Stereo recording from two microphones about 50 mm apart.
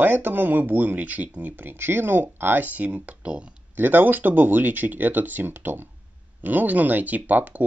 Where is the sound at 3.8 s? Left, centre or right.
Right.